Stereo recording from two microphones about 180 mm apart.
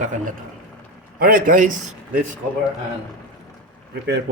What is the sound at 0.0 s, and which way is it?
A man's voice, 45° right (ahead or behind).